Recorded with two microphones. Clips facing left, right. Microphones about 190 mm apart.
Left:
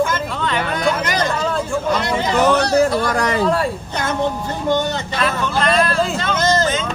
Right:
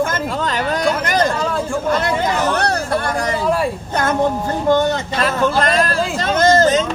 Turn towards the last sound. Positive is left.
turn(degrees=-45)  # may be behind; listen again after turning